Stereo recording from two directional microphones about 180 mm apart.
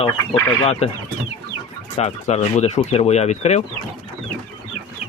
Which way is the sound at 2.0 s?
35° left (ahead or behind).